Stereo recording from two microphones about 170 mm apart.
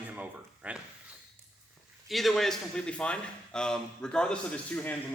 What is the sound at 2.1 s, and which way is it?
A man's voice, centre (ahead or behind).